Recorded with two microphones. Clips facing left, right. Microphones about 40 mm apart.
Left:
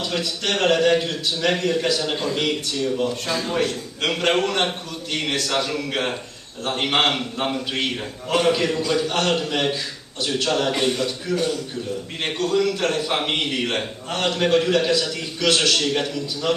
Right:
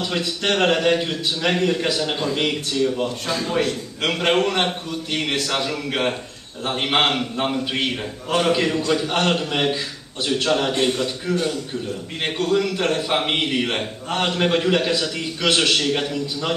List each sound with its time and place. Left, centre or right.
0.2 s a man's voice: right
3.3 s a man's voice: centre
9.0 s a man's voice: centre